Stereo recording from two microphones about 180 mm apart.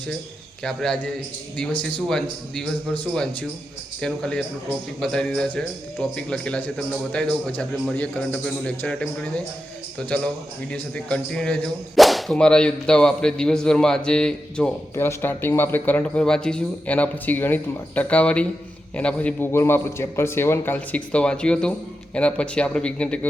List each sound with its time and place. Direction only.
0.6 s whip: 5° left (ahead or behind)
4.0 s whip: 5° left (ahead or behind)
18.9 s a man's voice: 5° left (ahead or behind)